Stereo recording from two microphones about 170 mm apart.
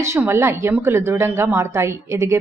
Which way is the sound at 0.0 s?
15° right (ahead or behind).